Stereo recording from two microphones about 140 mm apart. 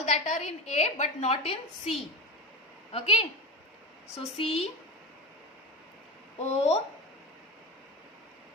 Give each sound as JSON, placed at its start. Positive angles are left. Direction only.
{"t": 0.0, "sound": "a woman's voice", "side_deg": 60}
{"t": 2.9, "sound": "a woman's voice", "side_deg": 45}
{"t": 6.4, "sound": "a woman's voice", "side_deg": 50}